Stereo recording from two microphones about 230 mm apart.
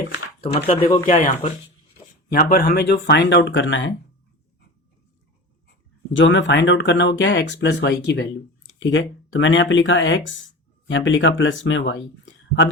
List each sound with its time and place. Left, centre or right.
0.4 s speech: left
2.3 s speech: left
6.1 s speech: left